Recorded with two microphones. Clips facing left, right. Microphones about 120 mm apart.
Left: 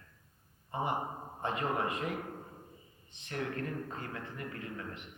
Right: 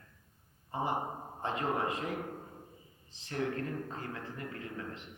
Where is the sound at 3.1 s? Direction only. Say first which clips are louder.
Right 3 dB; 30° right (ahead or behind).